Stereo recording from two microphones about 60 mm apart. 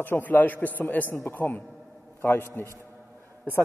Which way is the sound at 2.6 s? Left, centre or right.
Left.